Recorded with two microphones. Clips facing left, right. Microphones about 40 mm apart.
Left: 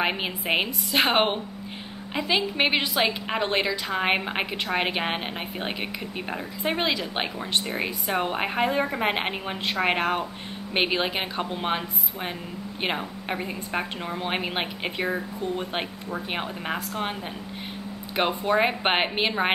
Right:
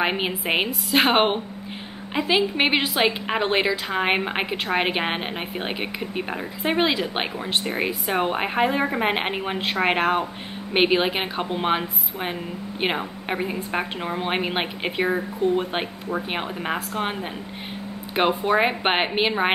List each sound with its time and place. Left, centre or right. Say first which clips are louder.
0.0 s a woman's voice: right 3 dB; centre
18.1 s a woman's voice: right 3 dB; centre